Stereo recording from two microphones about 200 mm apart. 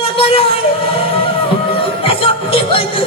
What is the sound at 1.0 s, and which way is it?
Music, 30° left (ahead or behind).